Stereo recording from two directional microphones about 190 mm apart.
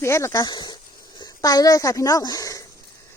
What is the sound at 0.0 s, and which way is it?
Speech, 15° left (ahead or behind).